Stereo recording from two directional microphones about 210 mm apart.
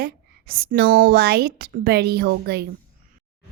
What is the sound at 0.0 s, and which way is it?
A woman's voice, 45° right (ahead or behind).